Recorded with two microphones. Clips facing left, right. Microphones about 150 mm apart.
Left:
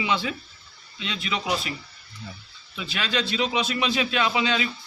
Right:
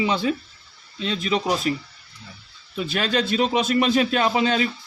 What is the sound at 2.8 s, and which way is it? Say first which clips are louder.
Speech: right 5 dB; 45° right (ahead or behind).